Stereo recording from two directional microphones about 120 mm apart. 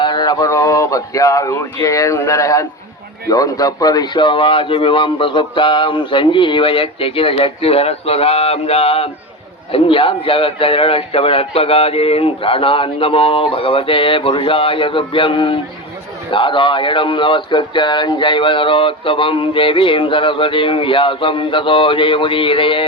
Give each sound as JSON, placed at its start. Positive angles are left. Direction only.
{"t": 0.0, "sound": "speech", "side_deg": 40}